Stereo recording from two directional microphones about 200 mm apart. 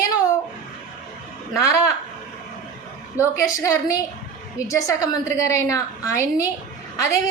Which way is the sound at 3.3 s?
15° left (ahead or behind).